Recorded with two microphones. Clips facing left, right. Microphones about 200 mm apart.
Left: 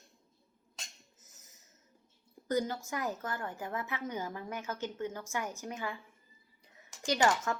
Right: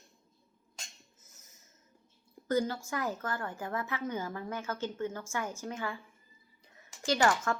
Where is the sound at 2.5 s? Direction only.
15° left (ahead or behind).